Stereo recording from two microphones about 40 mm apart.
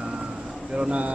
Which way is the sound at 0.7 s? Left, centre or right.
Right.